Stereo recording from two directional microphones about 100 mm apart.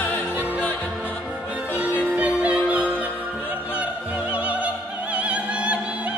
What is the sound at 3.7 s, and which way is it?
Opera, 15° right (ahead or behind).